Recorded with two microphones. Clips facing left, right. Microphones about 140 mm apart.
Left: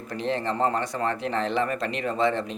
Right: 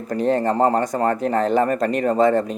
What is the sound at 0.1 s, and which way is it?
Speech, 45° right (ahead or behind).